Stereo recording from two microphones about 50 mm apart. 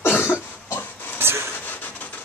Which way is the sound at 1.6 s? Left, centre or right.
Left.